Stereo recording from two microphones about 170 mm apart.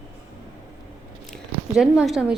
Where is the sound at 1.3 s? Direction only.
5° right (ahead or behind).